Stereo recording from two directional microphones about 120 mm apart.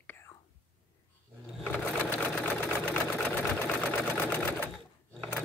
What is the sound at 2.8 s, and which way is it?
Sewing machine, 15° left (ahead or behind).